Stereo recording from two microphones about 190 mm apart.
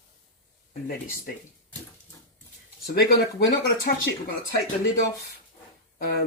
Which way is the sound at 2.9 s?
60° left (ahead or behind).